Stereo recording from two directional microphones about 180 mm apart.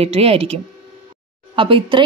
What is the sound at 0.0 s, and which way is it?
Speech, 35° right (ahead or behind).